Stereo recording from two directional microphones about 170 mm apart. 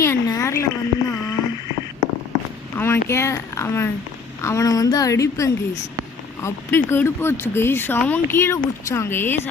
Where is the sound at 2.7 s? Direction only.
15° left (ahead or behind).